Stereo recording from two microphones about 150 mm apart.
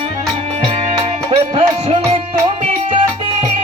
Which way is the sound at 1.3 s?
40° right (ahead or behind).